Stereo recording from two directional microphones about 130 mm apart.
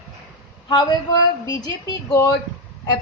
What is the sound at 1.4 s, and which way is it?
Speech, 30° left (ahead or behind).